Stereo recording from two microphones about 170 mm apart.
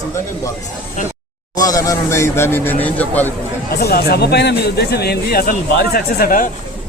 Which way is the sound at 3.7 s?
65° left (ahead or behind).